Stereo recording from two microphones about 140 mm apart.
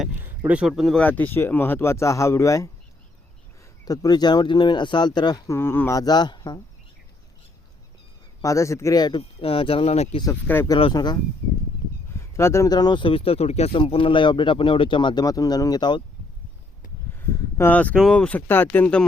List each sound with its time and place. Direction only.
0.2 s speech: 10° right (ahead or behind)
1.0 s speech: 10° left (ahead or behind)
3.8 s speech: 25° left (ahead or behind)
5.5 s speech: 15° left (ahead or behind)
6.0 s speech: 30° left (ahead or behind)
8.4 s speech: 20° left (ahead or behind); by 10.2 s 50° left (ahead or behind)
10.4 s speech: 15° left (ahead or behind)
10.8 s speech: 35° left (ahead or behind)
12.1 s speech: 20° left (ahead or behind)
17.1 s speech: 15° left (ahead or behind)